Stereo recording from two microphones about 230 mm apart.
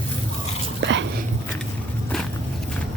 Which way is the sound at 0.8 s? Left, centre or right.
Right.